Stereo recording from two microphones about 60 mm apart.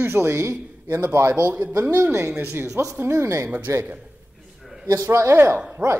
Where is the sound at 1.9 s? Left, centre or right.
Right.